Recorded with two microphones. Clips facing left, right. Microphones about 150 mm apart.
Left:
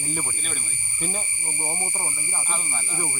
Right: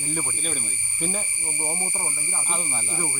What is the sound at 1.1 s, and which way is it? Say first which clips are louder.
Speech: right 1 dB; 5° left (ahead or behind).